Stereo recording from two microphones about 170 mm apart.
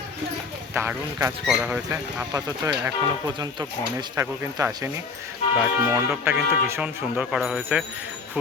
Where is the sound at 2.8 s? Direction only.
20° right (ahead or behind); by 7.8 s 5° right (ahead or behind).